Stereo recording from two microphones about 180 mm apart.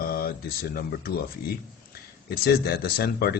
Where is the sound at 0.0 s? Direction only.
55° left (ahead or behind).